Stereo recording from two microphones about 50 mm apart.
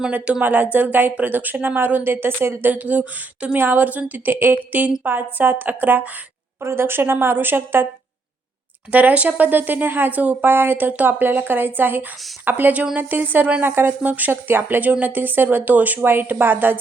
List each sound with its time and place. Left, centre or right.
0.1 s speech: right
0.4 s speech: right
2.7 s speech: right
3.5 s speech: right
6.6 s a woman's voice: right
8.9 s a woman's voice: right